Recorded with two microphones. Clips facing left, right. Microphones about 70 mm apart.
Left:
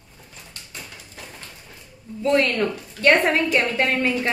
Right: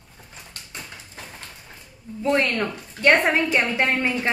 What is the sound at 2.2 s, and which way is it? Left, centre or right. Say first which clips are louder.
A woman's voice: left 2 dB; right.